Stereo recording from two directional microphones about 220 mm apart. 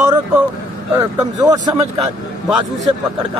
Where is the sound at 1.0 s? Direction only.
15° right (ahead or behind).